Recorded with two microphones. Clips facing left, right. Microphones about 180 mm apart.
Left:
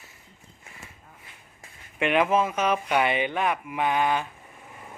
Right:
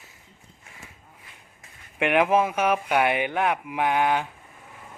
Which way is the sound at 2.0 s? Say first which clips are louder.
Right 2 dB; 15° right (ahead or behind).